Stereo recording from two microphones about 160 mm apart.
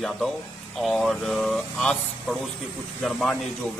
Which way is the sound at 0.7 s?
Centre (ahead or behind).